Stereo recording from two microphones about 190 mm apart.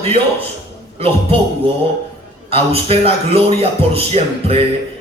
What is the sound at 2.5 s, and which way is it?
Speech, 30° right (ahead or behind).